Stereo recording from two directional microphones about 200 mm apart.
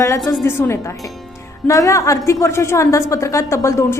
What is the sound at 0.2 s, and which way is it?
Speech, centre (ahead or behind).